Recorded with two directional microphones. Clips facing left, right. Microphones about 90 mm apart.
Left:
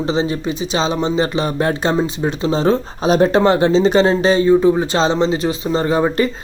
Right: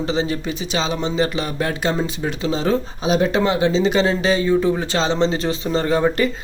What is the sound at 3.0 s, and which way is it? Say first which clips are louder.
Speech: left 6 dB; 45° left (ahead or behind).